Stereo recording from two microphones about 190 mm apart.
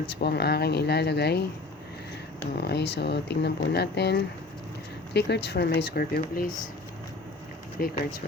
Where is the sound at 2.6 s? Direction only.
60° left (ahead or behind).